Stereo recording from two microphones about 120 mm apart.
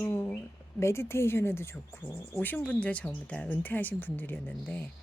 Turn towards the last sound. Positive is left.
turn(degrees=10)  # may be behind; listen again after turning